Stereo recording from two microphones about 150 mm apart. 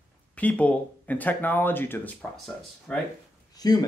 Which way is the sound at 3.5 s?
25° left (ahead or behind).